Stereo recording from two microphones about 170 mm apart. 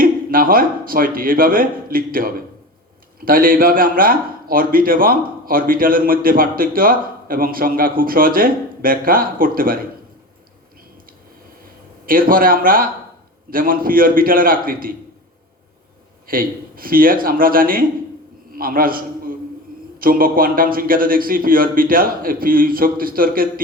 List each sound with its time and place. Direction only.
0.0 s a man's voice: 55° right (ahead or behind)
12.0 s a man's voice: 55° right (ahead or behind)
16.2 s a man's voice: 55° right (ahead or behind)